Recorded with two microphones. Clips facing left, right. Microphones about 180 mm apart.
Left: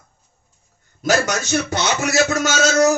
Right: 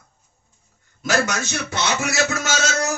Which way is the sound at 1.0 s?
40° left (ahead or behind).